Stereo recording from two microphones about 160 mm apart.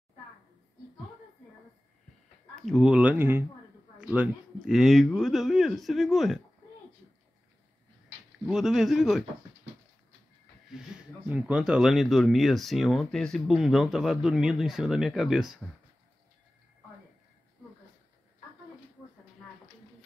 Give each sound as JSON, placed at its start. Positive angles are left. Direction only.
{"t": 2.5, "sound": "speech", "side_deg": 0}
{"t": 8.5, "sound": "speech", "side_deg": -5}
{"t": 10.9, "sound": "a sound", "side_deg": -5}
{"t": 11.2, "sound": "speech", "side_deg": -10}